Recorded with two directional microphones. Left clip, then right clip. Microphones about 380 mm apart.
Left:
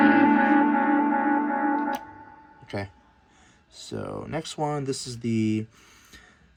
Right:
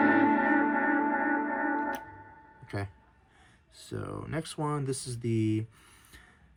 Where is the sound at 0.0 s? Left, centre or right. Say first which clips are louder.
Left 5 dB; left.